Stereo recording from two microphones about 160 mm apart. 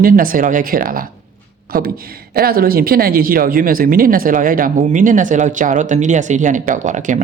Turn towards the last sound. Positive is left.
turn(degrees=-50)  # may be behind; listen again after turning